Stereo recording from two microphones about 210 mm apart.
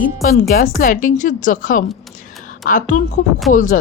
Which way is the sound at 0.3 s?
40° left (ahead or behind).